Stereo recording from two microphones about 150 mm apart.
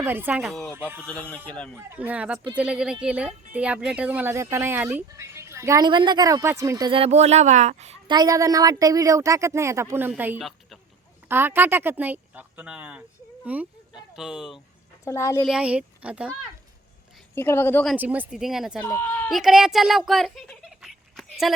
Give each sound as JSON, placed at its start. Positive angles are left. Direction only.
{"t": 0.0, "sound": "speech", "side_deg": -15}
{"t": 0.5, "sound": "speech", "side_deg": 5}
{"t": 0.8, "sound": "speech", "side_deg": -15}
{"t": 1.0, "sound": "a woman's voice", "side_deg": 10}
{"t": 1.7, "sound": "speech", "side_deg": -10}
{"t": 6.9, "sound": "speech", "side_deg": -45}
{"t": 8.0, "sound": "speech", "side_deg": -30}
{"t": 15.0, "sound": "speech", "side_deg": 20}
{"t": 15.4, "sound": "speech", "side_deg": -5}
{"t": 17.3, "sound": "a woman's voice", "side_deg": 15}
{"t": 17.9, "sound": "speech", "side_deg": -10}
{"t": 18.8, "sound": "speech", "side_deg": 15}
{"t": 19.3, "sound": "speech", "side_deg": -5}